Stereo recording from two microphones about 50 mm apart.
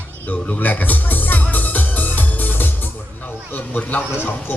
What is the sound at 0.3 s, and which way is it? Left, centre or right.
Music, left.